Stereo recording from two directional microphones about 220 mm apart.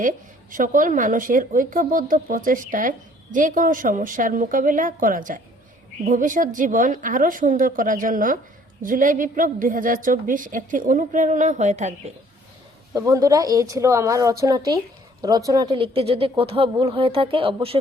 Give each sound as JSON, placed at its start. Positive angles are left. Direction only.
{"t": 0.5, "sound": "a woman's voice", "side_deg": -35}
{"t": 12.9, "sound": "speech", "side_deg": -15}